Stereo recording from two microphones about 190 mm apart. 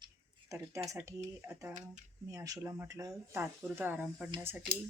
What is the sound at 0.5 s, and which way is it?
Speech, 15° right (ahead or behind).